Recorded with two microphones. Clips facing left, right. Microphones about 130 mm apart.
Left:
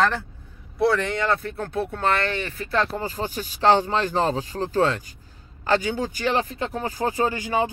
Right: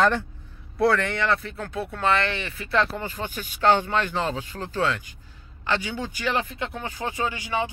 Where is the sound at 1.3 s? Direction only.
50° left (ahead or behind).